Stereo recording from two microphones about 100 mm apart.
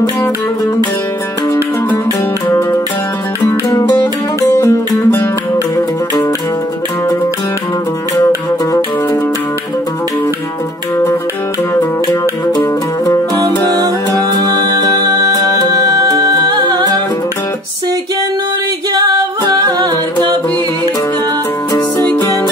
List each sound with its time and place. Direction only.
3.7 s music: 40° left (ahead or behind)
4.5 s music: 25° left (ahead or behind)
12.1 s music: 40° left (ahead or behind)
14.8 s music: 40° right (ahead or behind)